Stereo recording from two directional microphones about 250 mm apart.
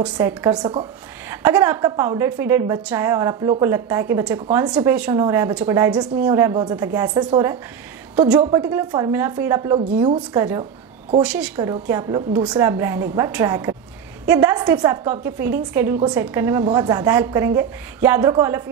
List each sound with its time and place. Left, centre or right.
0.0 s a woman's voice: centre
10.6 s a sound: right
11.2 s a woman's voice: centre